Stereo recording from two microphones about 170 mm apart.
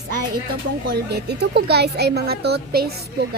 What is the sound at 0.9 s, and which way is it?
A woman's voice, 70° right (ahead or behind).